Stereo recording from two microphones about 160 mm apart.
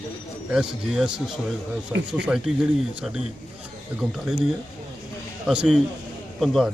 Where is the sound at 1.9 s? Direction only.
15° right (ahead or behind).